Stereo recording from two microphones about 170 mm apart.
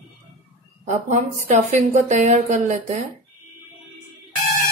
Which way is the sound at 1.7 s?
45° right (ahead or behind).